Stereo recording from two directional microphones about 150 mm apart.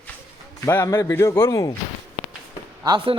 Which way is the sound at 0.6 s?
15° left (ahead or behind).